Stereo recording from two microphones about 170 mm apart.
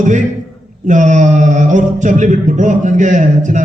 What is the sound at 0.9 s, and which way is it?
A man's voice, 45° right (ahead or behind).